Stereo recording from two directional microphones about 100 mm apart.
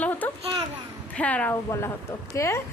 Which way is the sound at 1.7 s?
25° left (ahead or behind).